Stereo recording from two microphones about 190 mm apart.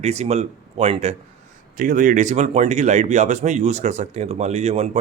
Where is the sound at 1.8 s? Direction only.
45° right (ahead or behind).